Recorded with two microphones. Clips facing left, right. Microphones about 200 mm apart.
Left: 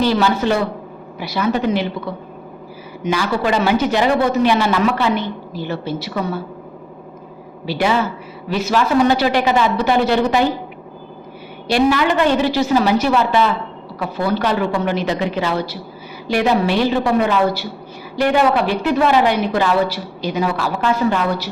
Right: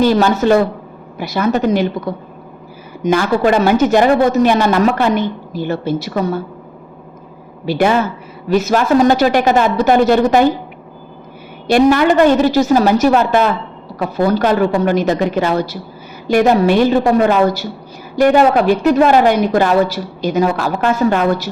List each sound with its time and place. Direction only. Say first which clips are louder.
0.0 s a woman's voice: right 4 dB; 45° right (ahead or behind)
7.6 s a woman's voice: right 4 dB; 50° right (ahead or behind)
11.7 s a woman's voice: right 5 dB; 50° right (ahead or behind)